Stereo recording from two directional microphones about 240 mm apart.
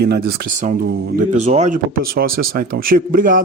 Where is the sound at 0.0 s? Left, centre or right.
Right.